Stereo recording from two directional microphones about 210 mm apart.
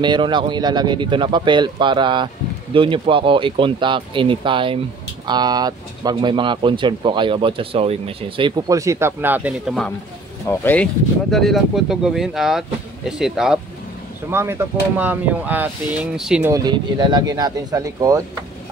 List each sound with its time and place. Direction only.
0.0 s speech: 20° right (ahead or behind); by 16.5 s 5° right (ahead or behind)
16.5 s speech: 20° right (ahead or behind)